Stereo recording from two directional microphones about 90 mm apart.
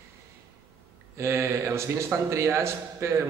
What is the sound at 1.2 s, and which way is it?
A man's voice, 30° right (ahead or behind).